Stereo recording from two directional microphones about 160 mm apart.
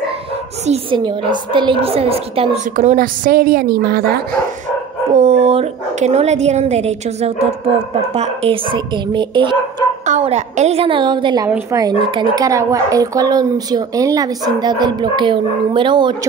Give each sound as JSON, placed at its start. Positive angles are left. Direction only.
{"t": 0.7, "sound": "a woman's voice", "side_deg": -30}
{"t": 2.7, "sound": "speech", "side_deg": -50}
{"t": 3.3, "sound": "a woman's voice", "side_deg": -65}
{"t": 3.8, "sound": "speech", "side_deg": -80}
{"t": 5.1, "sound": "a woman's voice", "side_deg": -40}
{"t": 10.0, "sound": "a woman's voice", "side_deg": -45}
{"t": 11.4, "sound": "speech", "side_deg": -15}